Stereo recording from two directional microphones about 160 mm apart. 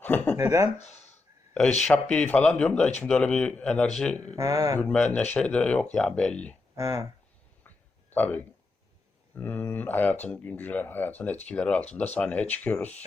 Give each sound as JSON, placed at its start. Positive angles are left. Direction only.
{"t": 0.0, "sound": "speech", "side_deg": 10}
{"t": 0.3, "sound": "speech", "side_deg": -20}
{"t": 0.8, "sound": "a sound", "side_deg": 45}
{"t": 1.9, "sound": "speech", "side_deg": 5}
{"t": 4.4, "sound": "speech", "side_deg": -20}
{"t": 4.8, "sound": "speech", "side_deg": 5}
{"t": 6.7, "sound": "speech", "side_deg": -20}
{"t": 8.1, "sound": "speech", "side_deg": 10}